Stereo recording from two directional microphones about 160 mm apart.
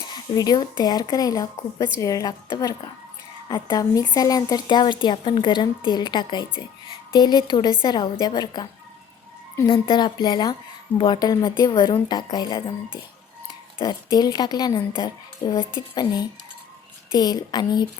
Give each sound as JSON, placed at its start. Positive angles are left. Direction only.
{"t": 0.1, "sound": "a woman's voice", "side_deg": 25}
{"t": 9.6, "sound": "a woman's voice", "side_deg": 35}